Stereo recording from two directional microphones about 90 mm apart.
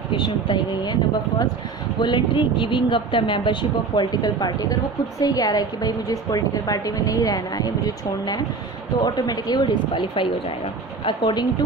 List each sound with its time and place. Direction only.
0.1 s speech: 65° left (ahead or behind)
2.0 s a woman's voice: 60° left (ahead or behind)